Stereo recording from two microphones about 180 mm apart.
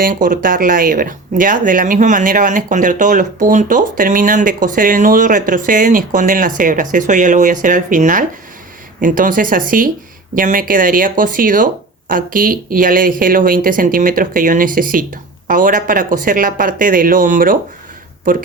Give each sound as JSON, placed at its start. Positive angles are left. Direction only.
{"t": 0.0, "sound": "speech", "side_deg": -50}